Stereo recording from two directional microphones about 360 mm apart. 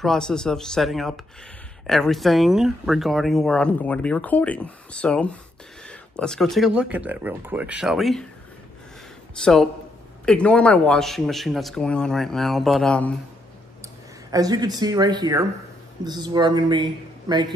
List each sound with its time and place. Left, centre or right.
0.0 s speech: centre
9.3 s speech: centre
14.3 s speech: centre